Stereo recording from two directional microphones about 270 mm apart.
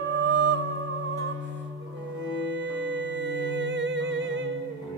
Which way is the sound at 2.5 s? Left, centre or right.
Right.